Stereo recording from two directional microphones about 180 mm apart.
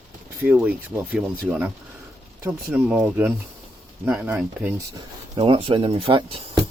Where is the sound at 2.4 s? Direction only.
10° right (ahead or behind).